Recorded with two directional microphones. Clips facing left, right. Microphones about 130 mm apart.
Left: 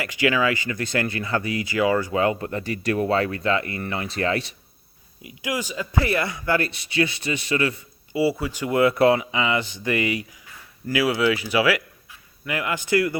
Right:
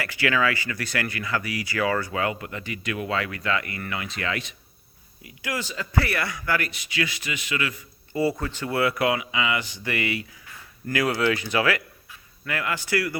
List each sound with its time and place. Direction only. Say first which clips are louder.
0.0 s speech: left 3 dB; 15° left (ahead or behind)
2.1 s speech: left 5 dB; 30° left (ahead or behind)
5.2 s speech: left 3 dB; 15° left (ahead or behind); by 7.8 s 30° left (ahead or behind)
8.1 s speech: left 2 dB; 5° left (ahead or behind)
10.8 s speech: left 2 dB; 5° left (ahead or behind)